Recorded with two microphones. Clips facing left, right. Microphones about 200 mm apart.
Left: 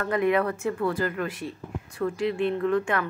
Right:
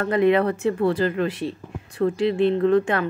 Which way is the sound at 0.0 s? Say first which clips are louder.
Right 5 dB; 30° right (ahead or behind).